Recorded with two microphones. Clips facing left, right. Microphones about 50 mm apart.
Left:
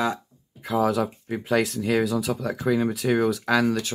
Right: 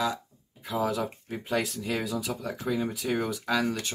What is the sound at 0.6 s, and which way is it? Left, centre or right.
Speech, left.